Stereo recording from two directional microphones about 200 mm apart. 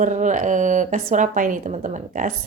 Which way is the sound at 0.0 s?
40° right (ahead or behind).